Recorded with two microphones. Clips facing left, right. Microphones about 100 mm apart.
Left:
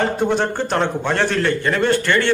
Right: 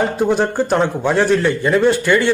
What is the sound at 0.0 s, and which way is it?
A man's voice, 5° right (ahead or behind).